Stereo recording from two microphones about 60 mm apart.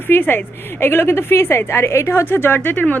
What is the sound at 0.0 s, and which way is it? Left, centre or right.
A woman's voice, left.